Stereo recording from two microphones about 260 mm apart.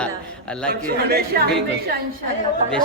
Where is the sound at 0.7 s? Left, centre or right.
Right.